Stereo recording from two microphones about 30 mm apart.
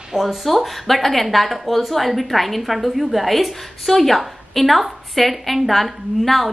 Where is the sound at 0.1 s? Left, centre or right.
Centre.